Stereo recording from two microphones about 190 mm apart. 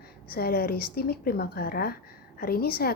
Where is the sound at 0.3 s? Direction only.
50° left (ahead or behind).